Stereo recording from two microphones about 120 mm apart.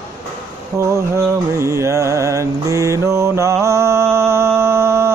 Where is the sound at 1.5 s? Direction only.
25° right (ahead or behind).